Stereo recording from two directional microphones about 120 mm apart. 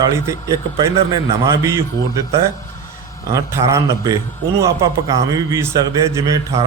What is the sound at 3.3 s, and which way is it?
A man's voice, 25° right (ahead or behind).